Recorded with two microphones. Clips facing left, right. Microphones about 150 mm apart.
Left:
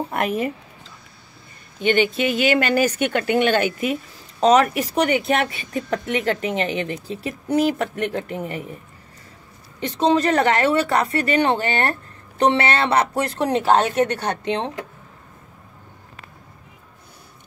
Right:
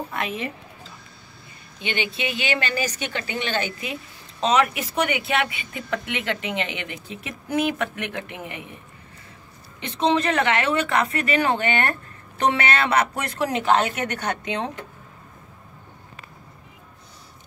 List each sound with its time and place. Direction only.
0.1 s speech: 50° left (ahead or behind)
1.8 s speech: 45° left (ahead or behind)
9.8 s speech: 40° left (ahead or behind)